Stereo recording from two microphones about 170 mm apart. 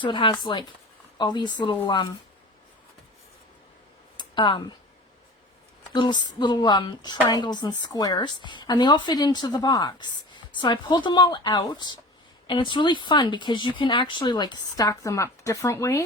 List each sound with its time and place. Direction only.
0.0 s a woman's voice: 30° left (ahead or behind)
4.2 s a sound: 25° left (ahead or behind)
5.9 s a woman's voice: 25° left (ahead or behind)